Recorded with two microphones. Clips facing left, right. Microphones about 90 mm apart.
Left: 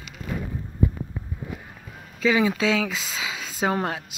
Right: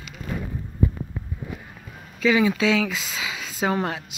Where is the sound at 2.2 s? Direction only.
30° left (ahead or behind).